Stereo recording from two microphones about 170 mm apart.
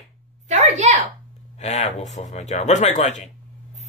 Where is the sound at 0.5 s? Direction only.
45° right (ahead or behind).